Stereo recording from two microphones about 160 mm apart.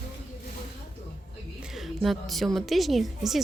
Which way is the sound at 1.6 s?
5° right (ahead or behind).